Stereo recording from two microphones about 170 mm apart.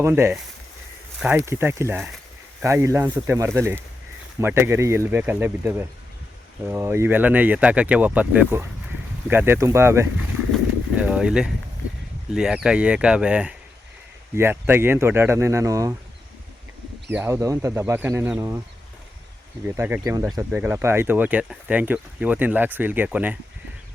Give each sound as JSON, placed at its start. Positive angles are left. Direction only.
{"t": 0.0, "sound": "speech", "side_deg": -15}
{"t": 10.5, "sound": "a sound", "side_deg": -5}
{"t": 12.3, "sound": "speech", "side_deg": -5}
{"t": 17.1, "sound": "speech", "side_deg": -15}
{"t": 19.6, "sound": "speech", "side_deg": -15}